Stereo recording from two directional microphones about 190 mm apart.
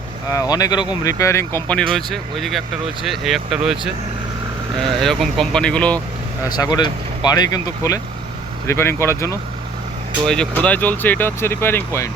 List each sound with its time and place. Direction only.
0.3 s speech: 20° left (ahead or behind); by 3.9 s centre (ahead or behind)
4.9 s speech: centre (ahead or behind)
6.4 s speech: 20° left (ahead or behind)
10.2 s speech: 5° left (ahead or behind)